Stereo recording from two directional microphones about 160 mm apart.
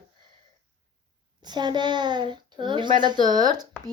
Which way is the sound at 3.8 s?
5° left (ahead or behind).